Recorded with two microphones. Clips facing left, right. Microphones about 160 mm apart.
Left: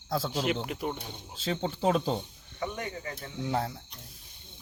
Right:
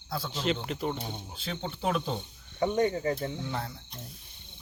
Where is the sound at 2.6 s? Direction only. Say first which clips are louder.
Right 9 dB; 30° right (ahead or behind).